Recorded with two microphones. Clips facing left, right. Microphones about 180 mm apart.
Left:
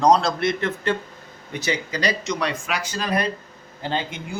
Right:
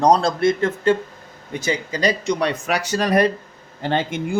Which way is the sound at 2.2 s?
55° right (ahead or behind).